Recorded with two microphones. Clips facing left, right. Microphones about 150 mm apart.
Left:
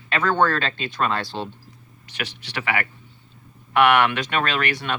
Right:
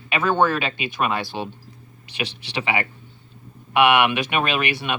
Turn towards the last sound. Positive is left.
turn(degrees=-15)  # may be behind; listen again after turning